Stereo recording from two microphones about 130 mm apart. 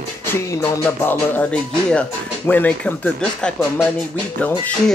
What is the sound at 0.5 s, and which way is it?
Music, 25° left (ahead or behind).